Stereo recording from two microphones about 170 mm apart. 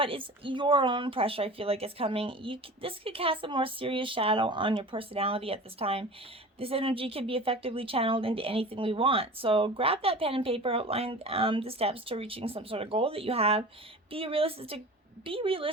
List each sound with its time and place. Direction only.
0.0 s a woman's voice: 30° right (ahead or behind)